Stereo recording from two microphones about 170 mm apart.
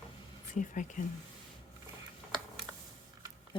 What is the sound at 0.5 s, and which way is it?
Speech, 50° left (ahead or behind).